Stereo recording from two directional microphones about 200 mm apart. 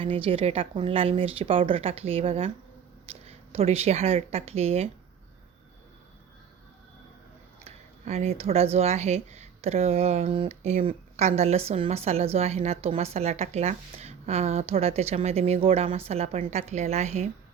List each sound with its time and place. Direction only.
0.0 s speech: 25° right (ahead or behind)
7.6 s speech: 30° right (ahead or behind)